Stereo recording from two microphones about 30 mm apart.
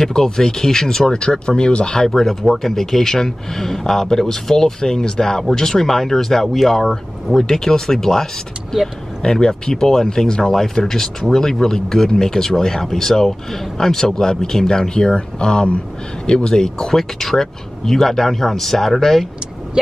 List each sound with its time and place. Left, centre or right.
0.1 s speech: centre
1.1 s speech: left
1.9 s speech: centre
2.1 s speech: centre
7.3 s speech: centre
9.2 s speech: left
15.1 s speech: left
16.9 s speech: centre